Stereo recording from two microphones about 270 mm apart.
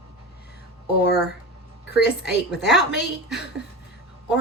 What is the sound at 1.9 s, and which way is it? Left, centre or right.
Speech, left.